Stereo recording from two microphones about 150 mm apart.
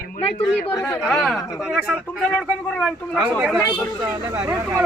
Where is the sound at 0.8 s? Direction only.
25° left (ahead or behind).